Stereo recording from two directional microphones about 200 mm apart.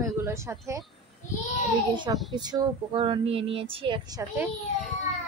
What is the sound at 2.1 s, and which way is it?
Speech, 20° right (ahead or behind).